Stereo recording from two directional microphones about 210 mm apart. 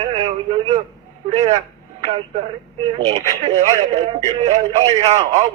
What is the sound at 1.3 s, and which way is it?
Speech, 30° right (ahead or behind).